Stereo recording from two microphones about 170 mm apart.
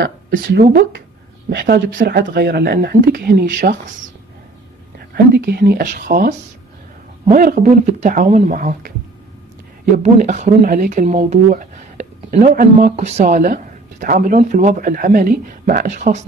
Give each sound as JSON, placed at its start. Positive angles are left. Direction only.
{"t": 0.0, "sound": "speech", "side_deg": -65}
{"t": 5.1, "sound": "speech", "side_deg": -70}
{"t": 7.3, "sound": "speech", "side_deg": -55}
{"t": 9.9, "sound": "speech", "side_deg": -45}